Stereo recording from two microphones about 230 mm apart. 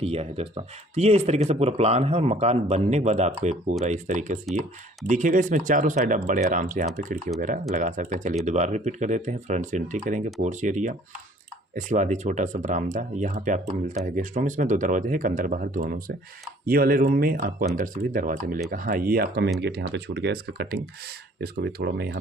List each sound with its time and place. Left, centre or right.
0.0 s speech: right